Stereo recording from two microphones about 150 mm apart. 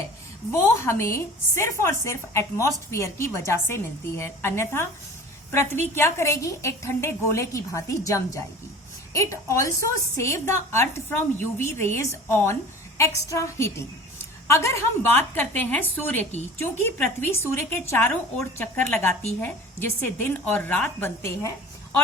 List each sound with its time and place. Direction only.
0.5 s a woman's voice: 15° left (ahead or behind)